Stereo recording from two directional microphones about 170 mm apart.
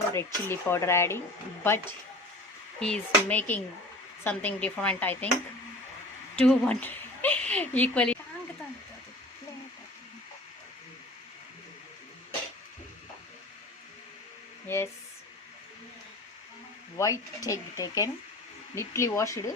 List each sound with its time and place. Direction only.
0.1 s speech: 15° left (ahead or behind)
2.8 s speech: 5° left (ahead or behind)
6.3 s a woman's voice: 5° left (ahead or behind)
14.7 s speech: 15° left (ahead or behind)
17.0 s speech: 20° left (ahead or behind)